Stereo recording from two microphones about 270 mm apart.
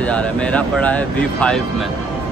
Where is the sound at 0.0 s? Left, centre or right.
Centre.